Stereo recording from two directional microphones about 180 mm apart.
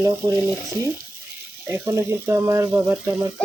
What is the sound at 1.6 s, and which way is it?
Speech, 15° right (ahead or behind).